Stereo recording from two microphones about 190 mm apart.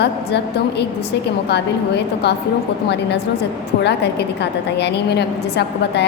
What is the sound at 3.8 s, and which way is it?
A woman's voice, 60° left (ahead or behind).